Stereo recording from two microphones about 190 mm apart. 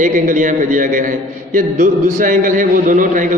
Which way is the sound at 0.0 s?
45° right (ahead or behind).